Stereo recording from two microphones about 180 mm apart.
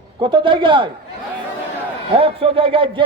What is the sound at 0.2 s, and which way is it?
Speech, 25° right (ahead or behind).